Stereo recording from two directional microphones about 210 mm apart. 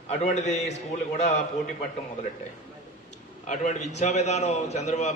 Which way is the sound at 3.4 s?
35° left (ahead or behind).